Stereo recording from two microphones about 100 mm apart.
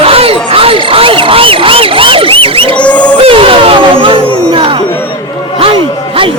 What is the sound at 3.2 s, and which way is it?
Music, 70° right (ahead or behind).